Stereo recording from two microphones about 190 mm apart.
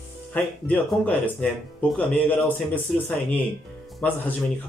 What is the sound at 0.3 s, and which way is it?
Speech, 10° left (ahead or behind).